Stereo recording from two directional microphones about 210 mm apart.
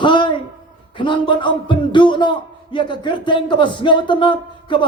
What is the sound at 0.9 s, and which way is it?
Speech, 25° left (ahead or behind).